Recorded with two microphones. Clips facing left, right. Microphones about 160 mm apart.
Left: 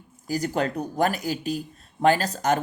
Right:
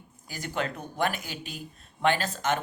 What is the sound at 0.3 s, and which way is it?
Speech, 40° left (ahead or behind).